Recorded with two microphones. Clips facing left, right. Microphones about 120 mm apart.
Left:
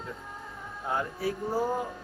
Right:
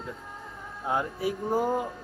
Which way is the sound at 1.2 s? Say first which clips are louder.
Right 2 dB; 15° right (ahead or behind).